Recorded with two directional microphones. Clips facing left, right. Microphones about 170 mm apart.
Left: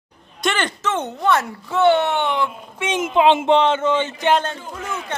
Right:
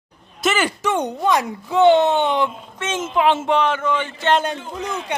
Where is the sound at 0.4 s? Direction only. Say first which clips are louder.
Right 2 dB; 5° right (ahead or behind).